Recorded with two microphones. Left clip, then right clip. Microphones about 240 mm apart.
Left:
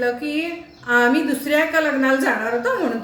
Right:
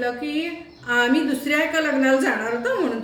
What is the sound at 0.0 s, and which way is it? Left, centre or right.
A woman's voice, centre.